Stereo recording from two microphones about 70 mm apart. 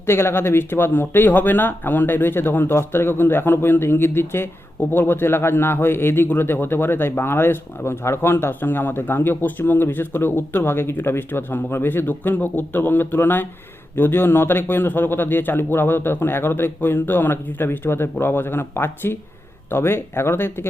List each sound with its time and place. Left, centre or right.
0.0 s speech: left